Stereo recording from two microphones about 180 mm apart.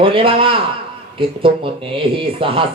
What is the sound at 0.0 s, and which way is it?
Music, 30° right (ahead or behind).